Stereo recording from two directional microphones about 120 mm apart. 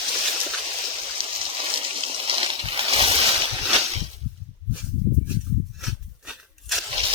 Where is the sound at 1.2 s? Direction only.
50° right (ahead or behind).